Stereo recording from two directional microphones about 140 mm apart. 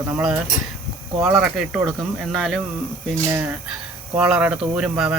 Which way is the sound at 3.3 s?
10° right (ahead or behind).